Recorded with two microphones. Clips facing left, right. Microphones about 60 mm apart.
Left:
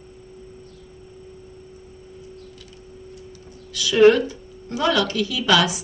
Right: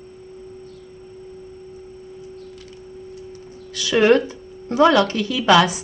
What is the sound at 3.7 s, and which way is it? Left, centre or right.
A woman's voice, right.